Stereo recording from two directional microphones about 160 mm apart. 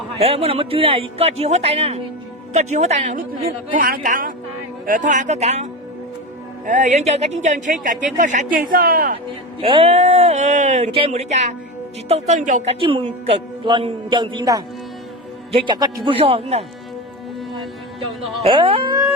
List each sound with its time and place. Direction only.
0.2 s a man's voice: 40° right (ahead or behind)
3.8 s a woman's voice: 65° right (ahead or behind); by 5.6 s 45° right (ahead or behind)
6.7 s speech: 50° right (ahead or behind)
8.7 s a woman's voice: 70° right (ahead or behind)
9.6 s speech: 35° right (ahead or behind)
12.8 s a man's voice: 35° right (ahead or behind)
18.0 s speech: 30° right (ahead or behind)